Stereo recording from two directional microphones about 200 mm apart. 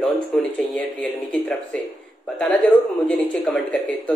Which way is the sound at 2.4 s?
Centre (ahead or behind).